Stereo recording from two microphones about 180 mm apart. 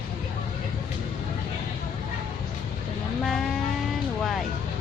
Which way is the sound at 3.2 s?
Centre (ahead or behind).